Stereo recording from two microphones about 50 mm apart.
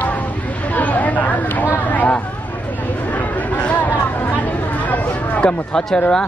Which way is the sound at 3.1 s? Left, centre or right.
Left.